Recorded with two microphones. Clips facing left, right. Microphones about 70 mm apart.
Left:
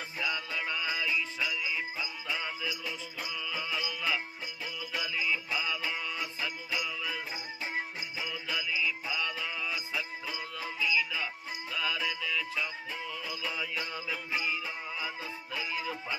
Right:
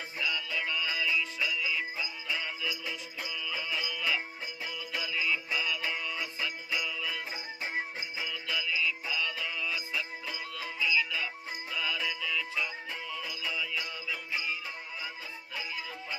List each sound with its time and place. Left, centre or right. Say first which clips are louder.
0.2 s music: right 1 dB; left
3.2 s music: left 1 dB; centre
8.3 s music: right 1 dB; centre
13.9 s music: left 2 dB; left